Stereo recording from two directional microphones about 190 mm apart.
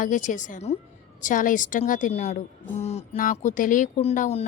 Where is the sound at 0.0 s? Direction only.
40° left (ahead or behind).